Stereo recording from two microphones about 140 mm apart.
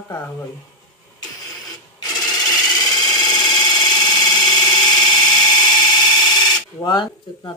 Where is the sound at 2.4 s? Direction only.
30° left (ahead or behind).